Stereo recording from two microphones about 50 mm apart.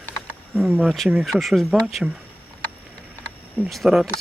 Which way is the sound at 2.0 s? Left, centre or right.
Centre.